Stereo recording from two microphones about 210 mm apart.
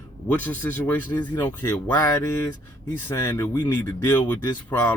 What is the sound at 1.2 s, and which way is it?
Speech, 20° left (ahead or behind).